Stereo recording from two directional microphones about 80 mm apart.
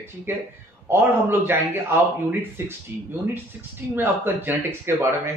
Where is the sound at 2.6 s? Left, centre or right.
Right.